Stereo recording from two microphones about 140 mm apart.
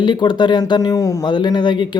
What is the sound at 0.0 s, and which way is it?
Speech, 35° left (ahead or behind).